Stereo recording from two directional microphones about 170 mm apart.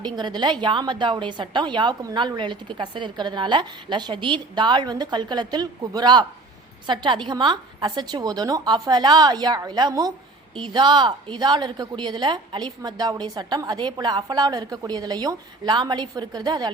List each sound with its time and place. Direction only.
0.0 s a woman's voice: 25° right (ahead or behind)